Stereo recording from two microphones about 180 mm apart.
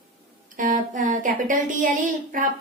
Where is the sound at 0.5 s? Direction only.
45° right (ahead or behind).